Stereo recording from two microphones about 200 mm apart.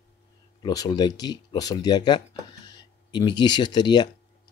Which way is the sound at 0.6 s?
20° left (ahead or behind).